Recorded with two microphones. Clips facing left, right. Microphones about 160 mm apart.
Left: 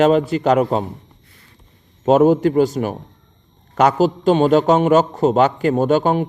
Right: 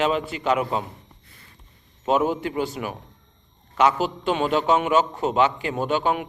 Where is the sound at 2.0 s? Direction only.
45° left (ahead or behind).